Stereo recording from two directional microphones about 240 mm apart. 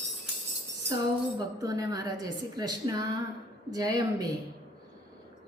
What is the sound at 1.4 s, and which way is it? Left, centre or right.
A woman's voice, centre.